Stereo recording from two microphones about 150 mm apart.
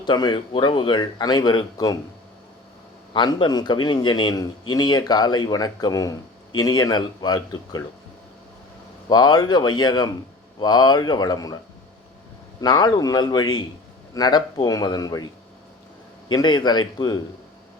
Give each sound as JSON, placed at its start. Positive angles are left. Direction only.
{"t": 0.0, "sound": "speech", "side_deg": 30}
{"t": 3.1, "sound": "a man's voice", "side_deg": 30}
{"t": 9.0, "sound": "a man's voice", "side_deg": 30}
{"t": 12.5, "sound": "a man's voice", "side_deg": 30}
{"t": 16.3, "sound": "a man's voice", "side_deg": 30}